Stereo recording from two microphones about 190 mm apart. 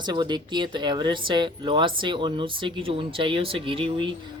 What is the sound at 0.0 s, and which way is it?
Speech, 25° right (ahead or behind).